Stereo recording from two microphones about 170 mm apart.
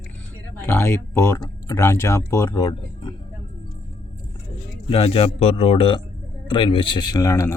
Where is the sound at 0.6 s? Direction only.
15° left (ahead or behind).